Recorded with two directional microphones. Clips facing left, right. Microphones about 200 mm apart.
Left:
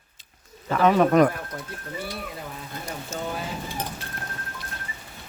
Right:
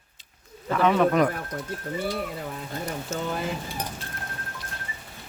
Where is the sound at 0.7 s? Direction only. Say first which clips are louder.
Left 2 dB; 40° left (ahead or behind).